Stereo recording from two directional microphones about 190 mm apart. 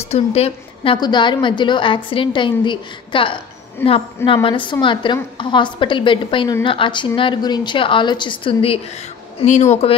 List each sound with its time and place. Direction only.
0.0 s a woman's voice: 35° left (ahead or behind)
3.8 s a woman's voice: 10° left (ahead or behind)
4.3 s a woman's voice: 25° left (ahead or behind)